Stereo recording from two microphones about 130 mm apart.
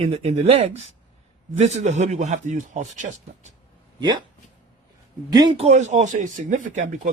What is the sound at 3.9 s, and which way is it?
Speech, 35° right (ahead or behind).